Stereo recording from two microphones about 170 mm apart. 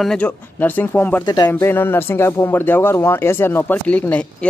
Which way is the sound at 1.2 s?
25° left (ahead or behind).